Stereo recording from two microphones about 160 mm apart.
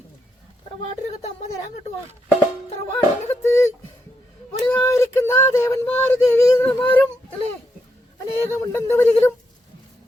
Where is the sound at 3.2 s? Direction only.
15° left (ahead or behind).